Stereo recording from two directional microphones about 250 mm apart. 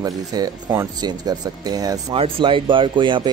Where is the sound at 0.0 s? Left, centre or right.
Centre.